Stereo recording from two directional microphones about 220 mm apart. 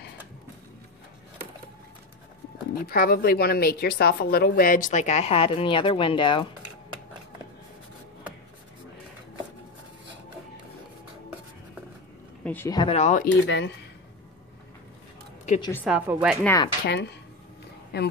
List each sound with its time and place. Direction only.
2.7 s speech: 45° left (ahead or behind); by 6.4 s 20° left (ahead or behind)
12.4 s speech: 10° left (ahead or behind); by 13.3 s 35° left (ahead or behind)
13.5 s speech: 50° left (ahead or behind)
15.8 s speech: 5° right (ahead or behind)
16.4 s speech: 15° left (ahead or behind)
16.8 s a woman's voice: 50° left (ahead or behind)